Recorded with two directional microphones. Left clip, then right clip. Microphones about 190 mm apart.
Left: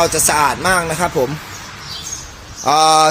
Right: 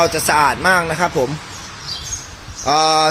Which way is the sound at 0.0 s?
Centre (ahead or behind).